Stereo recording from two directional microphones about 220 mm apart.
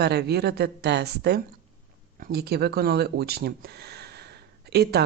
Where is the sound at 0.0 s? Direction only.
45° right (ahead or behind).